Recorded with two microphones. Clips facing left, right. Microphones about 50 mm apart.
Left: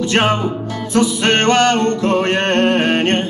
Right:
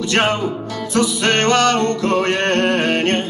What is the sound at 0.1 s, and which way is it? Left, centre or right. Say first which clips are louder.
Music: even; left.